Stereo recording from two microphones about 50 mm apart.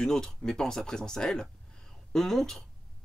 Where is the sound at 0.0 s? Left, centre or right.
Centre.